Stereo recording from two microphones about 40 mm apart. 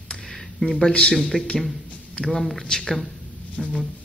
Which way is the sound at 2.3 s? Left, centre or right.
Centre.